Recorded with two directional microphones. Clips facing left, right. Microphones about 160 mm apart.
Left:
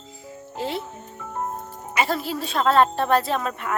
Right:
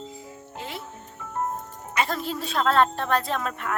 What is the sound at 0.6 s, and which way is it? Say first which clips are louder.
Music: left 9 dB; 35° left (ahead or behind).